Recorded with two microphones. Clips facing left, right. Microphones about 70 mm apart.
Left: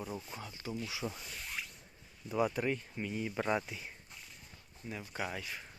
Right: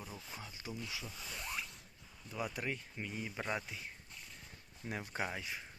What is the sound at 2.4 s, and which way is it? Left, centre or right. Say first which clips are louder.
Speech: left 7 dB; centre.